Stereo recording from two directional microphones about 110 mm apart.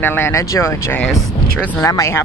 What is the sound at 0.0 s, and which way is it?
Speech, 20° left (ahead or behind).